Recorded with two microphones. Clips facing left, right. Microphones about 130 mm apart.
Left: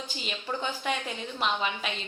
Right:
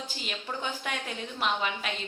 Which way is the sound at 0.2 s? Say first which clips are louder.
Left 3 dB; centre (ahead or behind).